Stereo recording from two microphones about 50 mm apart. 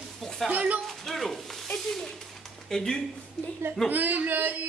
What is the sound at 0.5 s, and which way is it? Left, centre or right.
Speech, right.